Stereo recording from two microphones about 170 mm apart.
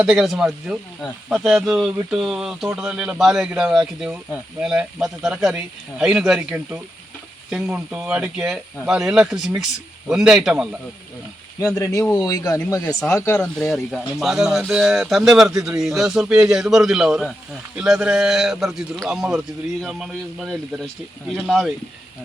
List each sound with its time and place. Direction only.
0.0 s speech: 5° right (ahead or behind)
11.7 s speech: 20° left (ahead or behind)
13.6 s speech: centre (ahead or behind)